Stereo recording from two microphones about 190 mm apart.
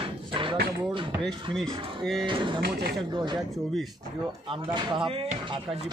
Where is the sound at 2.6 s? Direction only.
55° right (ahead or behind).